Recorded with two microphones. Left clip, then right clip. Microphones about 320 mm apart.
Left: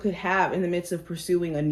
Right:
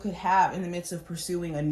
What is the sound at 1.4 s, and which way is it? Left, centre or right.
Speech, centre.